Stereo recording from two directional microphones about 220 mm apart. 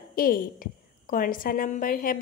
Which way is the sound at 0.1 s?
40° left (ahead or behind).